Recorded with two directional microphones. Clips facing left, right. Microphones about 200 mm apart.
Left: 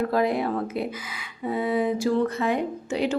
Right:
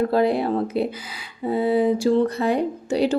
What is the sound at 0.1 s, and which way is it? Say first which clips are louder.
Speech: right 4 dB; 30° right (ahead or behind).